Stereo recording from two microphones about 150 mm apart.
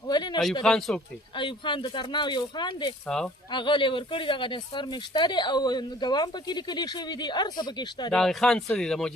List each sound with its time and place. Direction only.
0.1 s a sound: 30° left (ahead or behind)
0.6 s speech: 5° left (ahead or behind)
1.4 s speech: 30° left (ahead or behind)
3.1 s speech: 5° left (ahead or behind)
3.5 s speech: 30° left (ahead or behind)
8.1 s speech: 5° left (ahead or behind)